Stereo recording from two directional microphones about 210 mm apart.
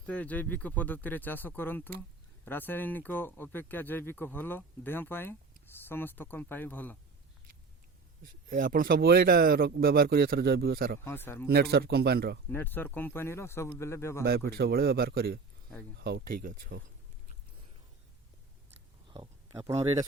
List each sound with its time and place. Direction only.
0.0 s speech: 5° left (ahead or behind)
8.4 s speech: 40° right (ahead or behind)
11.0 s speech: 10° left (ahead or behind)
11.4 s speech: 50° right (ahead or behind)
12.5 s speech: 10° left (ahead or behind)
14.3 s speech: 45° right (ahead or behind)
19.1 s speech: 20° right (ahead or behind)